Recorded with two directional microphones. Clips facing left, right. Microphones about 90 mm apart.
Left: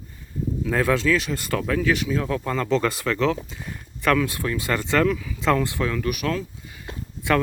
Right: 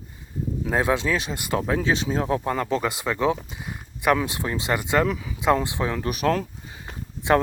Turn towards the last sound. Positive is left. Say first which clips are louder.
# right 2 dB
turn(degrees=-20)  # may be behind; listen again after turning